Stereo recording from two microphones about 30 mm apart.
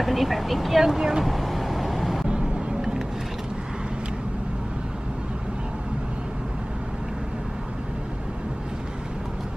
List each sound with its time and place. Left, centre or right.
0.0 s speech: centre
0.8 s speech: centre
1.2 s vehicle: centre